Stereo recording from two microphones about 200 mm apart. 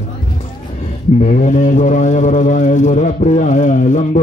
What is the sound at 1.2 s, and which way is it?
A man's voice, 35° left (ahead or behind).